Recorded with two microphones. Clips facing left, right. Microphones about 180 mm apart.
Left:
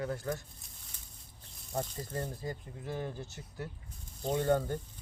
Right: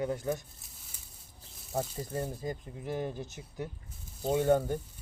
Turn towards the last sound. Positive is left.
turn(degrees=-10)  # may be behind; listen again after turning